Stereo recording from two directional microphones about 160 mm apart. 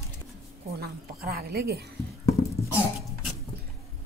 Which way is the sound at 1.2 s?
75° right (ahead or behind).